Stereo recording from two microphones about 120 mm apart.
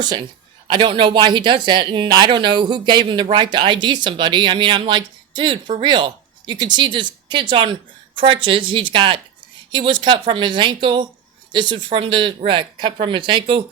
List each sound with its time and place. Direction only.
0.0 s speech: 35° right (ahead or behind)